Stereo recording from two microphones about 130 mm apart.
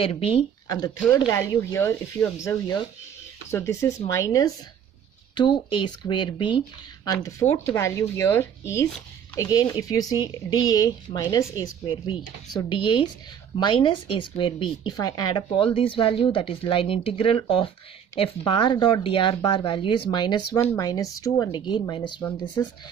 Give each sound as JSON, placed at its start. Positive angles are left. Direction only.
{"t": 0.0, "sound": "speech", "side_deg": 45}
{"t": 0.7, "sound": "a woman's voice", "side_deg": 30}
{"t": 3.4, "sound": "a woman's voice", "side_deg": 20}
{"t": 5.3, "sound": "speech", "side_deg": 35}
{"t": 7.1, "sound": "a woman's voice", "side_deg": 25}